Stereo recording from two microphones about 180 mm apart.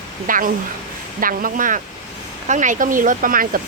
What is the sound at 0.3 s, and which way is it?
Speech, 50° right (ahead or behind).